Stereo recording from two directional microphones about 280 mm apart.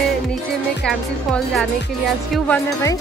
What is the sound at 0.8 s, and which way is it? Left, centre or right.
Speech, centre.